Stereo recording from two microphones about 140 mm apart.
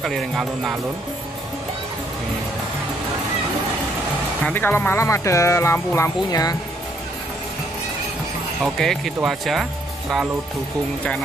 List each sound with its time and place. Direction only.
0.0 s speech: centre (ahead or behind)
4.5 s speech: 15° left (ahead or behind)
8.7 s speech: centre (ahead or behind)